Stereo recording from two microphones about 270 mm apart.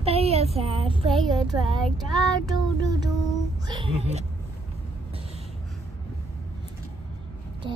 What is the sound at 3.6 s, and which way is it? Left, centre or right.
Child singing, centre.